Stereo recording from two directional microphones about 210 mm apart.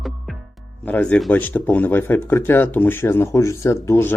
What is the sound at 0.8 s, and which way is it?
Speech, 5° left (ahead or behind).